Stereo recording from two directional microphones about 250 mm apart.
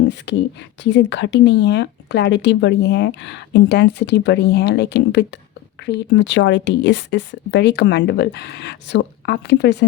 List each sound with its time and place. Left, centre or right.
0.3 s speech: left